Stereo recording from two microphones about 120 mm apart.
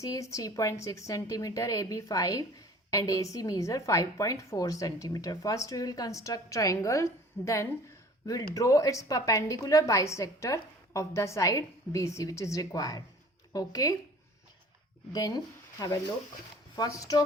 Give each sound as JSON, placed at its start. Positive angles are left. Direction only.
{"t": 0.0, "sound": "a woman's voice", "side_deg": 25}
{"t": 15.1, "sound": "a woman's voice", "side_deg": 30}
{"t": 16.7, "sound": "speech", "side_deg": 30}